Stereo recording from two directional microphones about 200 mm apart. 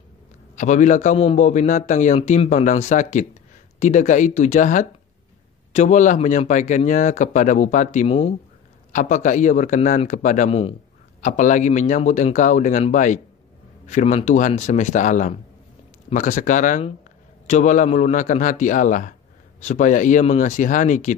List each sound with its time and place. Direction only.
0.6 s a man's voice: 35° left (ahead or behind)